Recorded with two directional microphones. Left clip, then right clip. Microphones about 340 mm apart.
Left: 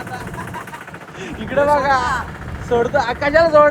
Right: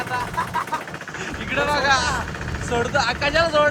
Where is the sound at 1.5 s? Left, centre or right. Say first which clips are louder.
Left 5 dB; centre.